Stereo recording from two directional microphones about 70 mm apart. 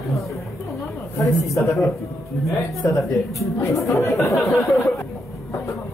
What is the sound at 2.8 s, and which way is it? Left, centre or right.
Speech, left.